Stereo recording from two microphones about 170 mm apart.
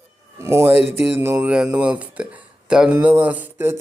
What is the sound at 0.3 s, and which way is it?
Speech, 15° right (ahead or behind).